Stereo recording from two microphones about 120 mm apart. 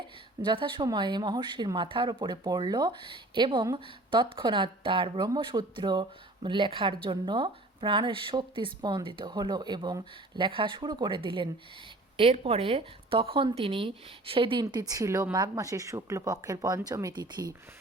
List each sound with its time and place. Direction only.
0.4 s speech: 45° right (ahead or behind)
14.6 s speech: 30° right (ahead or behind)